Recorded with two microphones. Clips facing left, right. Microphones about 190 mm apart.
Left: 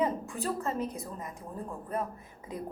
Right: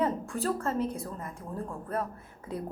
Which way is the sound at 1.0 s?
15° left (ahead or behind).